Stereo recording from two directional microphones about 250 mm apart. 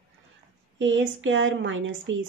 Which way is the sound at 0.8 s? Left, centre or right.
Right.